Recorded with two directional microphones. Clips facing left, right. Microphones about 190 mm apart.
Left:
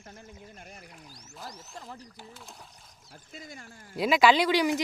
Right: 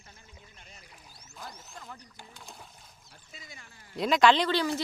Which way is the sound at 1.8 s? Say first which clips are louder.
Left 4 dB; 30° left (ahead or behind).